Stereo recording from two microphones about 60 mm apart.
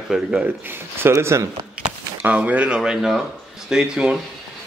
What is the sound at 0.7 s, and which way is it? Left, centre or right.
Speech, right.